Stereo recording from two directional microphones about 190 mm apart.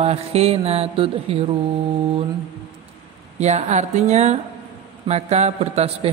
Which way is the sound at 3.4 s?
35° right (ahead or behind).